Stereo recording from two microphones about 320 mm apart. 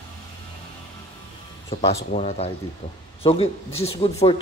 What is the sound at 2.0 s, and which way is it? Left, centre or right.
Speech, left.